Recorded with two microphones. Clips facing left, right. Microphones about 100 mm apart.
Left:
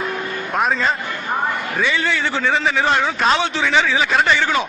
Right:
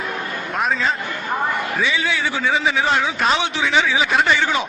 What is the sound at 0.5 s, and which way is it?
A man's voice, centre (ahead or behind).